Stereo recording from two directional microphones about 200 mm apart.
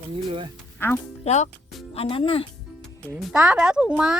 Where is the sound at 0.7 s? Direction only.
10° left (ahead or behind).